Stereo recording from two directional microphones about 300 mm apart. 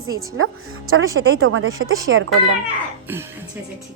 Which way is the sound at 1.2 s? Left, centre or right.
Right.